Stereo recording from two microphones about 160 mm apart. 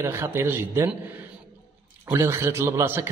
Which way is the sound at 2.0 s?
15° right (ahead or behind).